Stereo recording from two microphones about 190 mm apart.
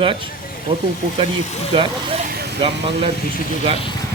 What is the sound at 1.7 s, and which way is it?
Speech, 25° right (ahead or behind).